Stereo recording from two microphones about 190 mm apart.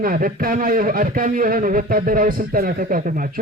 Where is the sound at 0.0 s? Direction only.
45° right (ahead or behind).